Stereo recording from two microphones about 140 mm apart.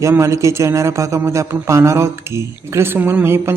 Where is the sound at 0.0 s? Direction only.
20° right (ahead or behind).